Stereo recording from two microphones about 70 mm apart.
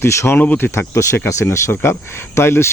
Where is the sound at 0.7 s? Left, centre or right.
Left.